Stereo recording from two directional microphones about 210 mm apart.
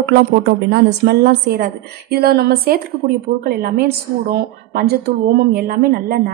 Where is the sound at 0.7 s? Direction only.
55° right (ahead or behind).